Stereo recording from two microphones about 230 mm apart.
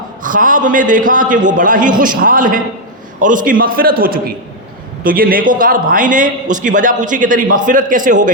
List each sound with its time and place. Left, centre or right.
0.2 s a man's voice: right